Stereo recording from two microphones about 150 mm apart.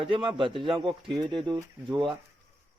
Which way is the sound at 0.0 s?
35° right (ahead or behind).